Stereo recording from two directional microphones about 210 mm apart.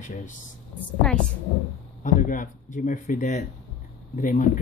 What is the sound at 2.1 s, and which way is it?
Speech, 40° left (ahead or behind).